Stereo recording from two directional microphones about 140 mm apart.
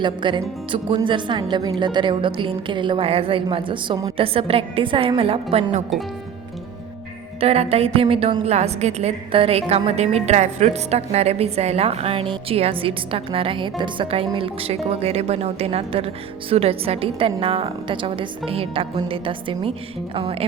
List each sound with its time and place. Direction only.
0.0 s a woman's voice: 35° right (ahead or behind)
7.3 s a woman's voice: 45° right (ahead or behind)